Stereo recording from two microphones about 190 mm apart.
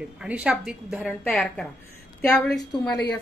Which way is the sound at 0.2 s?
5° right (ahead or behind).